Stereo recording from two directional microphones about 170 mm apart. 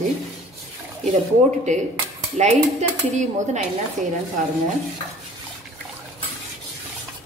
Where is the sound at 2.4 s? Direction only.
45° right (ahead or behind).